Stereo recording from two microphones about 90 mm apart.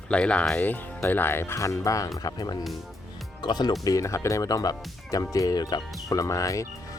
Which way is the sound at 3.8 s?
35° left (ahead or behind).